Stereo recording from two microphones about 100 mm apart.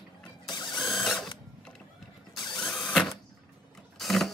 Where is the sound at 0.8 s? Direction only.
Centre (ahead or behind).